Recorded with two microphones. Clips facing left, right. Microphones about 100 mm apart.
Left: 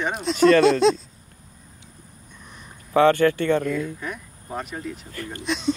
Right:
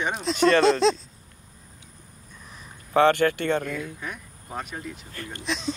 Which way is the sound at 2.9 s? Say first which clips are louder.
Left 2 dB; 30° right (ahead or behind).